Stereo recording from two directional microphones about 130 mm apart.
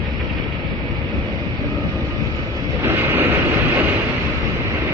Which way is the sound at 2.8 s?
15° right (ahead or behind).